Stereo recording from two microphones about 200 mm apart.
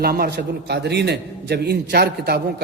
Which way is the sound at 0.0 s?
50° right (ahead or behind).